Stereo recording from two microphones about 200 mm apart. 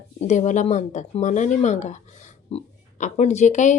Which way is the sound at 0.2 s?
35° left (ahead or behind).